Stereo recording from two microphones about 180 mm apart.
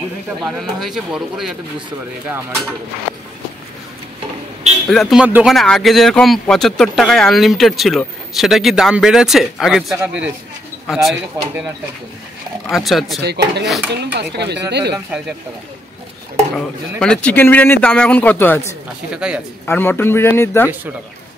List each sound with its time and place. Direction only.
0.4 s speech: centre (ahead or behind)
4.8 s speech: centre (ahead or behind)
12.6 s speech: centre (ahead or behind)
13.2 s speech: 65° right (ahead or behind)
16.5 s a man's voice: 5° left (ahead or behind)
19.1 s speech: 5° right (ahead or behind)
19.6 s a man's voice: 10° left (ahead or behind)